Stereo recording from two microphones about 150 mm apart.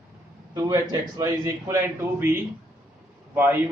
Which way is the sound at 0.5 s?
20° right (ahead or behind).